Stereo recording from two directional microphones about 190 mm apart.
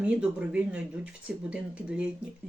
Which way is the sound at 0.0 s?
5° right (ahead or behind).